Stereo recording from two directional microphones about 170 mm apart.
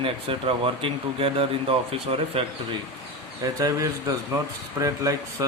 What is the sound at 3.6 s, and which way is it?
A man's voice, 20° right (ahead or behind).